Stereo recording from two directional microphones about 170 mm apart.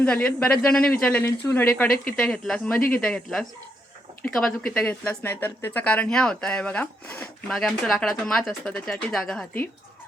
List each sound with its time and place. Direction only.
0.0 s a woman's voice: 5° left (ahead or behind)